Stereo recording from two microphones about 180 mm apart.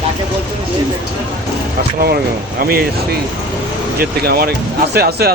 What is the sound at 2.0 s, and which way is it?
Speech, 60° right (ahead or behind).